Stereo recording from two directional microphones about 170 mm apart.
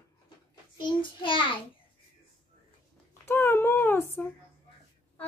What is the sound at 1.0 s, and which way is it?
Speech, 30° left (ahead or behind).